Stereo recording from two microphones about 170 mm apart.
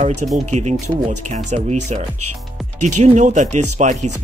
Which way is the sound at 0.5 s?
40° right (ahead or behind).